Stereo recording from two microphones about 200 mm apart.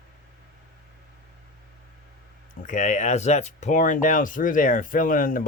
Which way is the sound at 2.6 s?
40° left (ahead or behind).